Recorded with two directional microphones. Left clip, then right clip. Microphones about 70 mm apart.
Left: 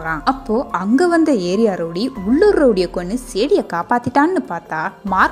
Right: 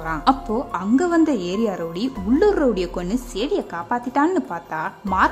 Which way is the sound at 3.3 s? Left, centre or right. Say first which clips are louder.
Left 8 dB; left.